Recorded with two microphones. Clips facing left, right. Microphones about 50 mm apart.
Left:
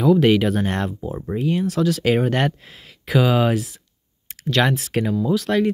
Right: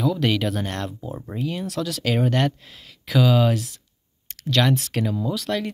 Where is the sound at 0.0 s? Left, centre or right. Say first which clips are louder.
Left 7 dB; centre.